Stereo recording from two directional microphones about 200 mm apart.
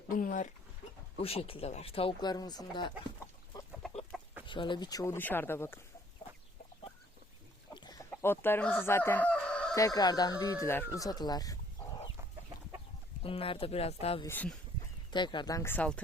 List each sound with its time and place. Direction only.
0.1 s speech: 40° left (ahead or behind)
1.2 s speech: 30° left (ahead or behind)
4.1 s chicken: centre (ahead or behind)
4.4 s speech: 25° left (ahead or behind)
7.7 s a sound: 20° left (ahead or behind)
8.1 s chicken: 10° left (ahead or behind)
9.7 s speech: 15° left (ahead or behind)
13.2 s speech: 25° left (ahead or behind)
14.3 s speech: 10° left (ahead or behind)
15.1 s speech: 25° left (ahead or behind)